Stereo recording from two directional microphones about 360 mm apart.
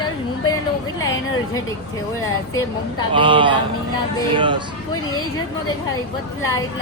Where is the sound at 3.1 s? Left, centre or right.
Centre.